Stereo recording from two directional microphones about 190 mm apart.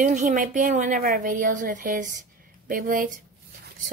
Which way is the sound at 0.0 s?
40° right (ahead or behind).